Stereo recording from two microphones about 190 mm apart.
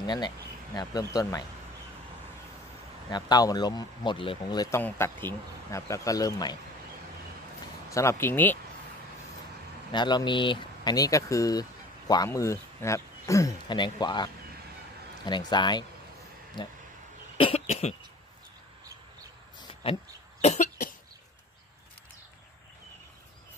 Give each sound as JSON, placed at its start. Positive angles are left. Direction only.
{"t": 0.0, "sound": "speech", "side_deg": 25}
{"t": 3.1, "sound": "speech", "side_deg": 20}
{"t": 7.9, "sound": "speech", "side_deg": 15}
{"t": 9.9, "sound": "speech", "side_deg": 25}
{"t": 15.5, "sound": "speech", "side_deg": 25}
{"t": 17.4, "sound": "cough", "side_deg": 30}
{"t": 19.7, "sound": "a sound", "side_deg": 30}
{"t": 20.4, "sound": "cough", "side_deg": 35}